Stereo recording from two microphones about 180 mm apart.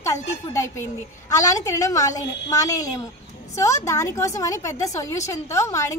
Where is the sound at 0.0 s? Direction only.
15° left (ahead or behind).